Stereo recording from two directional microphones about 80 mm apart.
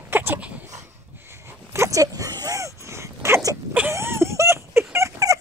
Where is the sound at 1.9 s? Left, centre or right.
Right.